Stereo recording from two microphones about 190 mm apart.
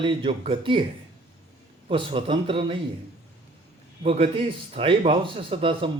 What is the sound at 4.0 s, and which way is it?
A man's voice, 35° right (ahead or behind).